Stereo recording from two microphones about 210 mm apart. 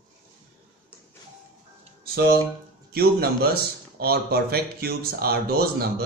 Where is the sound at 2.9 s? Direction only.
45° right (ahead or behind).